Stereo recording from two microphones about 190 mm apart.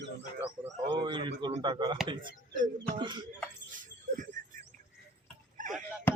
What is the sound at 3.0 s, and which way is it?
Speech, 25° right (ahead or behind).